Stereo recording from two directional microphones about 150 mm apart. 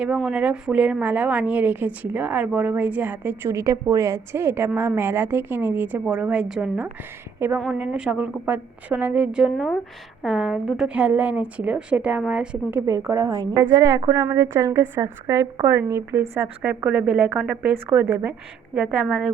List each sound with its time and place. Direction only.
0.3 s a woman's voice: 10° right (ahead or behind)
12.8 s a woman's voice: 20° right (ahead or behind)
18.7 s a woman's voice: 5° right (ahead or behind)